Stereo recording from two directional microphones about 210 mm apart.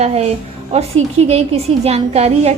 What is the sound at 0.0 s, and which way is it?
A woman's voice, 30° right (ahead or behind).